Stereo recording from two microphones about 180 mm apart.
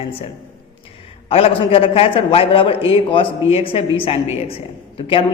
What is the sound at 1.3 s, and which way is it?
A man's voice, 30° left (ahead or behind).